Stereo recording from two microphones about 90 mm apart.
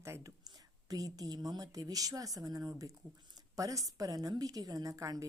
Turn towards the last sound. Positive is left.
turn(degrees=-40)  # may be behind; listen again after turning